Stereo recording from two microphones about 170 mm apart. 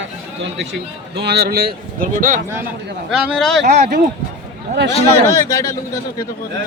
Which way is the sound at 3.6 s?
65° right (ahead or behind).